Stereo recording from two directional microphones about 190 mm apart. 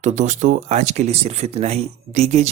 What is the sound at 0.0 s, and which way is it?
Speech, 35° right (ahead or behind).